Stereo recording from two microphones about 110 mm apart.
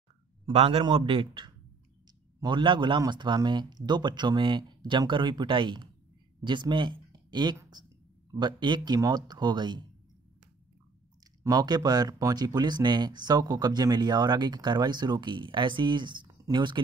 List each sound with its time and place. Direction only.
0.5 s a man's voice: 60° right (ahead or behind); by 9.8 s 45° right (ahead or behind)
11.4 s speech: 35° right (ahead or behind)